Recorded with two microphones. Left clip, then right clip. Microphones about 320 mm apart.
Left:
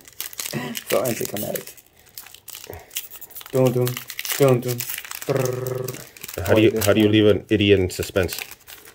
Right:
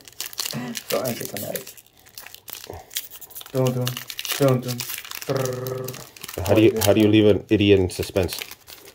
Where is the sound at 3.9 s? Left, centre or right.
Centre.